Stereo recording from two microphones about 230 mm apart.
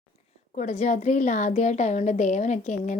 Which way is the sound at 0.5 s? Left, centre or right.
Left.